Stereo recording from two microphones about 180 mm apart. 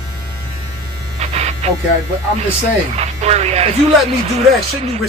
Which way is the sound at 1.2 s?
35° right (ahead or behind).